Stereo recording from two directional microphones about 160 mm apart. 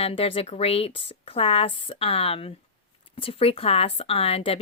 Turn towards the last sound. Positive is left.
turn(degrees=35)  # may be behind; listen again after turning